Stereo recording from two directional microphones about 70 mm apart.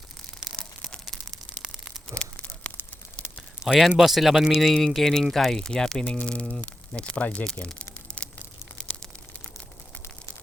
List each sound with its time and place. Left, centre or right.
0.5 s a sound: centre
2.1 s tearing: centre
3.8 s speech: centre